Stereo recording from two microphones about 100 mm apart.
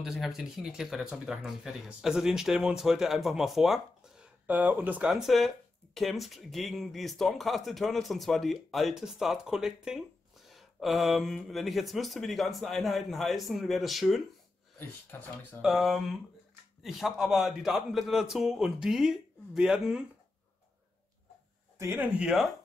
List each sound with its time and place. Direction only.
0.0 s speech: 5° right (ahead or behind)
4.5 s speech: 15° right (ahead or behind)
5.1 s speech: centre (ahead or behind)
15.6 s speech: centre (ahead or behind)
21.9 s speech: 15° right (ahead or behind)